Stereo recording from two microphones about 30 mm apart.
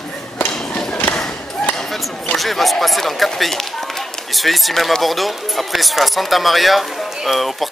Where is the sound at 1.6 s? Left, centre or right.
Centre.